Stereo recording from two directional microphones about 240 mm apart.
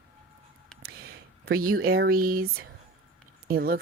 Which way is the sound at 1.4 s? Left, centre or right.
Right.